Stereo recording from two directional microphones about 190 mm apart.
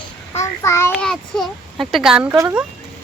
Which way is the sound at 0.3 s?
15° left (ahead or behind).